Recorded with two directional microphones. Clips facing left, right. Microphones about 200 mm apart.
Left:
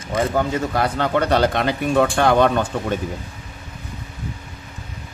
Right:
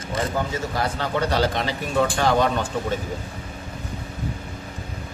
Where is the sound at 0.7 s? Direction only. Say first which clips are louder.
Left 5 dB; 60° left (ahead or behind).